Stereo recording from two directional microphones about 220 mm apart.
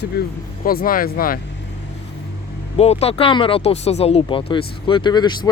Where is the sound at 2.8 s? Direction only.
30° left (ahead or behind).